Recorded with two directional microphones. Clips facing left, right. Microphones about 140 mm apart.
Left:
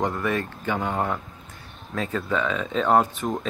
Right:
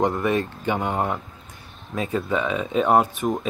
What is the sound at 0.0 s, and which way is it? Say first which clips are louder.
Speech: right 4 dB; 20° right (ahead or behind).